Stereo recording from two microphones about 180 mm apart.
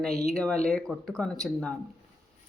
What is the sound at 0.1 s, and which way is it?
Speech, 40° left (ahead or behind).